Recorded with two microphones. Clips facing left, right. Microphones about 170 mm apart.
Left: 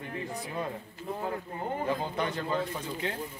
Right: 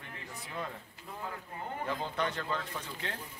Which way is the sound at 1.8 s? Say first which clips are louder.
Left 2 dB; 10° left (ahead or behind).